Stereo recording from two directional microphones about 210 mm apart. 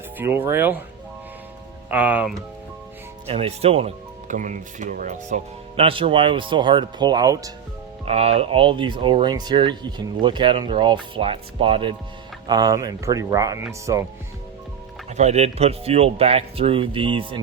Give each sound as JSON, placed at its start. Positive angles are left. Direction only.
{"t": 0.2, "sound": "speech", "side_deg": -10}
{"t": 1.9, "sound": "speech", "side_deg": -5}
{"t": 3.2, "sound": "speech", "side_deg": -30}
{"t": 8.0, "sound": "speech", "side_deg": -30}
{"t": 15.1, "sound": "speech", "side_deg": -30}